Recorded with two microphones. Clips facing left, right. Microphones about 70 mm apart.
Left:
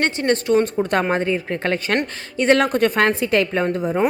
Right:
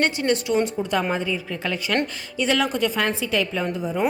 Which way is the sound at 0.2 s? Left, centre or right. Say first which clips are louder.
Left 4 dB; left.